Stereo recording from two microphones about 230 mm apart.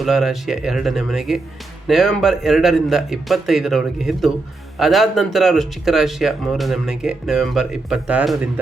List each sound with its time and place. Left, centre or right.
0.0 s speech: centre